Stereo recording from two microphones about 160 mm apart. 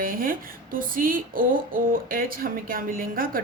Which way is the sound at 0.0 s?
65° right (ahead or behind).